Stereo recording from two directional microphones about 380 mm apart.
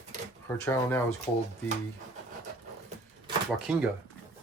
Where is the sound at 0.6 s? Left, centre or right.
Centre.